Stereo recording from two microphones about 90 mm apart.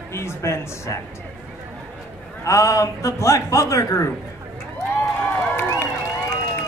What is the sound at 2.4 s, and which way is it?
A man's voice, 35° left (ahead or behind).